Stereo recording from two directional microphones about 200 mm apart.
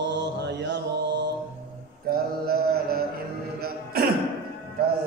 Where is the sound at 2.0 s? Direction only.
50° right (ahead or behind).